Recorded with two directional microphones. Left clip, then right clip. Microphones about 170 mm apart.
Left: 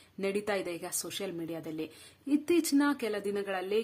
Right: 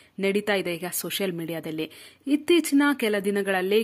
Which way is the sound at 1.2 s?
40° right (ahead or behind).